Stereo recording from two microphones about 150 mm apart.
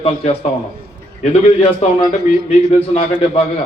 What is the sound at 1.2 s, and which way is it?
A man's voice, 45° left (ahead or behind).